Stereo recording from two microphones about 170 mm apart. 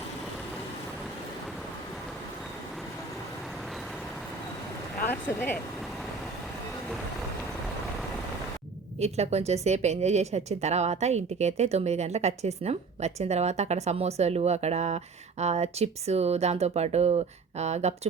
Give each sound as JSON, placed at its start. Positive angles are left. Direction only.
{"t": 9.0, "sound": "speech", "side_deg": -40}